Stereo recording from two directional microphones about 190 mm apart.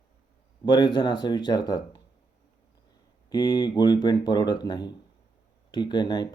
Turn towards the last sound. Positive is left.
turn(degrees=20)  # may be behind; listen again after turning